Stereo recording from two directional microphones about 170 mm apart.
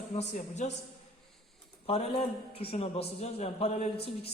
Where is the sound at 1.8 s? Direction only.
35° left (ahead or behind).